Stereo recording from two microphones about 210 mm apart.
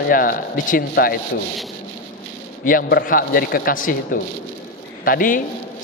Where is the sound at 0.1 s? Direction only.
40° left (ahead or behind).